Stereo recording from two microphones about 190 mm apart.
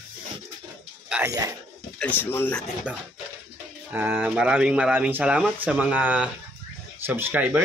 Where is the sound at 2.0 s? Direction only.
10° left (ahead or behind).